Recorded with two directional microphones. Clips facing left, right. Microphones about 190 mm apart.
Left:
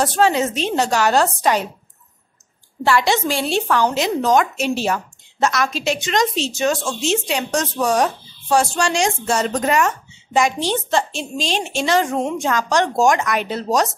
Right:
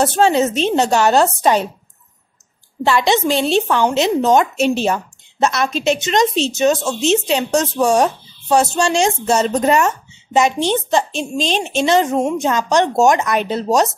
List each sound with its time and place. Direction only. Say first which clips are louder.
0.0 s a woman's voice: right 3 dB; 25° right (ahead or behind)
2.8 s a woman's voice: right 2 dB; 20° right (ahead or behind)